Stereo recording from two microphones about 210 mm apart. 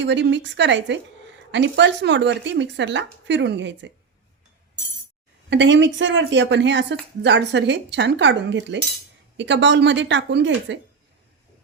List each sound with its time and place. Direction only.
0.0 s speech: 60° right (ahead or behind)
5.5 s speech: 60° right (ahead or behind)